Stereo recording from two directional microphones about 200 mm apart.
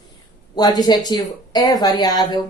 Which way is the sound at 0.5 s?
20° left (ahead or behind).